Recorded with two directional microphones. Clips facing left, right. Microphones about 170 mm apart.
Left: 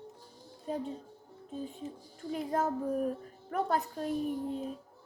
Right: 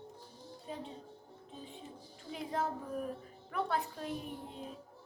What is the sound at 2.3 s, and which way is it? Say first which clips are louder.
A woman's voice: left 5 dB; 45° left (ahead or behind).